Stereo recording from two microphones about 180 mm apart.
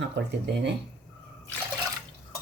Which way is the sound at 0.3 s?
70° right (ahead or behind).